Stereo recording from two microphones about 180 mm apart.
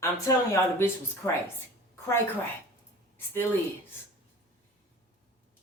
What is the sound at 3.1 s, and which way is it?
Speech, 10° left (ahead or behind).